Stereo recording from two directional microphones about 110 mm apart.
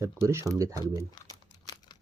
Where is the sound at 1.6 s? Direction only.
40° left (ahead or behind).